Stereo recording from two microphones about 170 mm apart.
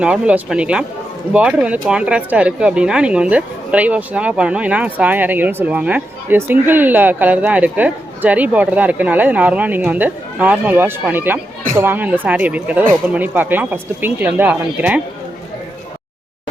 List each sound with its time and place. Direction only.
0.0 s speech: 5° right (ahead or behind)